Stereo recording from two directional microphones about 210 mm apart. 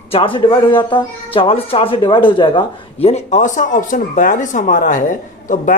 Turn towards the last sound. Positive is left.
turn(degrees=40)  # may be behind; listen again after turning